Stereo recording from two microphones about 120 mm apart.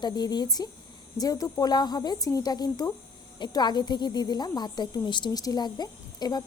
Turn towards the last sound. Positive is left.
turn(degrees=35)  # may be behind; listen again after turning